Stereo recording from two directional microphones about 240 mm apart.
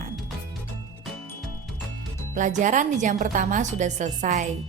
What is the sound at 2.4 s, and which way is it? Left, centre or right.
A woman's voice, right.